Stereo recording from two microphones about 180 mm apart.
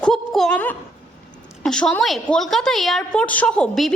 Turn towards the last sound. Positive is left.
turn(degrees=5)  # may be behind; listen again after turning